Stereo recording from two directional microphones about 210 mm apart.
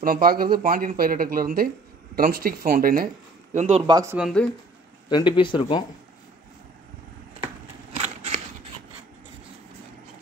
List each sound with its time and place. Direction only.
0.0 s speech: 45° right (ahead or behind)
3.5 s speech: 30° right (ahead or behind)
4.2 s speech: 5° left (ahead or behind)
5.1 s speech: 20° left (ahead or behind)